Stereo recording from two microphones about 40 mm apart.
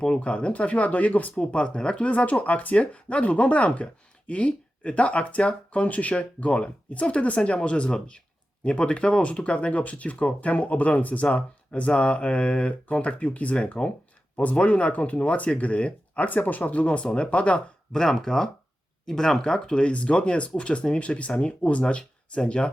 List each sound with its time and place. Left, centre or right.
0.2 s speech: left
1.4 s speech: left
17.9 s speech: centre